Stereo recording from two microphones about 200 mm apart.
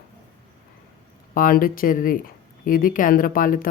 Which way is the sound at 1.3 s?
45° left (ahead or behind).